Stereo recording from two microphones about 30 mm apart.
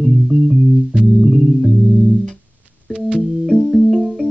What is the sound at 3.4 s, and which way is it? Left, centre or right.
Music, centre.